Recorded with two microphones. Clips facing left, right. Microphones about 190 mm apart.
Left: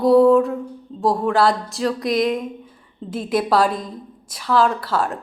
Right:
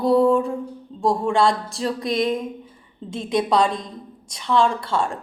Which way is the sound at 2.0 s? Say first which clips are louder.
Left 2 dB; 25° right (ahead or behind).